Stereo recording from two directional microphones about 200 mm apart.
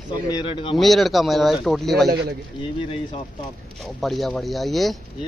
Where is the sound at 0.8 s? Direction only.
Centre (ahead or behind).